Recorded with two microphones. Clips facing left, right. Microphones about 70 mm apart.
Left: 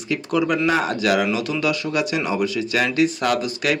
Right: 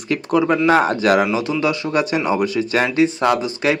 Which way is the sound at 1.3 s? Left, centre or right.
Right.